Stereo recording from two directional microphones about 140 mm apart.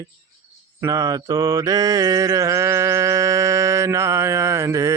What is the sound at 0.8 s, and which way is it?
Mantra, 25° right (ahead or behind).